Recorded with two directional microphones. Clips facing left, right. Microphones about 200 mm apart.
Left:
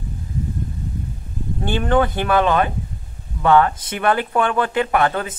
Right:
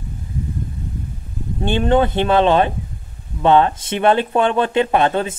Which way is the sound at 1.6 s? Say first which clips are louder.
Right 3 dB; 25° right (ahead or behind).